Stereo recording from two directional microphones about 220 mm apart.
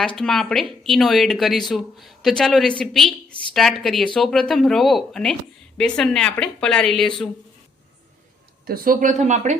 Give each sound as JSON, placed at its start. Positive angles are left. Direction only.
{"t": 0.2, "sound": "a woman's voice", "side_deg": 0}
{"t": 8.6, "sound": "speech", "side_deg": -40}